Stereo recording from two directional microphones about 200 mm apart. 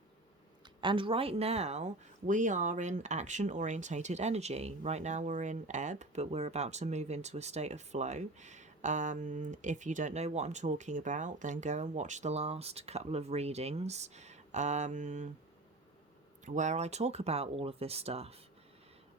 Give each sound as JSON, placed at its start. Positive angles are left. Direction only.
{"t": 0.8, "sound": "speech", "side_deg": -25}
{"t": 16.5, "sound": "speech", "side_deg": -35}